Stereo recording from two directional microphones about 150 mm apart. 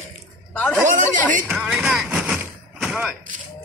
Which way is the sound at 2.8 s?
5° right (ahead or behind).